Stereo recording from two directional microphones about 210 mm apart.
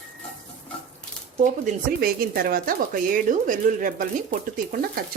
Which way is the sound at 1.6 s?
45° right (ahead or behind).